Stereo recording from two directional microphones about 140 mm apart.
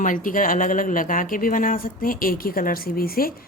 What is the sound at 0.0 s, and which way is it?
Speech, 75° left (ahead or behind).